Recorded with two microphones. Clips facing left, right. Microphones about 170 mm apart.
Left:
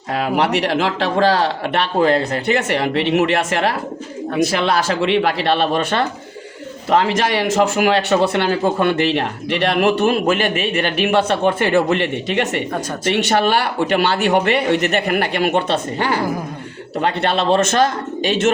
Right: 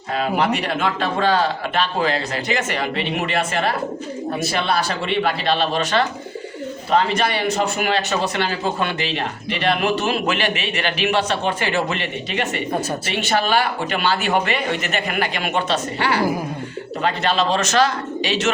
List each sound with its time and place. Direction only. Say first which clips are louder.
0.3 s speech: left 5 dB; 75° left (ahead or behind)
4.5 s speech: left 4 dB; 90° left; by 6.1 s 55° left (ahead or behind)
7.0 s speech: left 3 dB; 90° left; by 16.2 s 45° left (ahead or behind)
17.2 s speech: left 5 dB; 60° left (ahead or behind)